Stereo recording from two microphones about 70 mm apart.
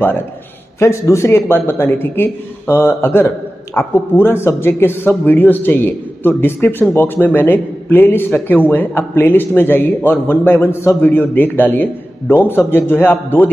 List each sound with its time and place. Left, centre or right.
0.7 s a man's voice: left